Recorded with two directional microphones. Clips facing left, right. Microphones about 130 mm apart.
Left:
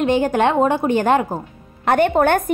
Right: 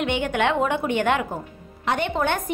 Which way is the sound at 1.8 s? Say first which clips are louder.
Left 8 dB; 50° left (ahead or behind).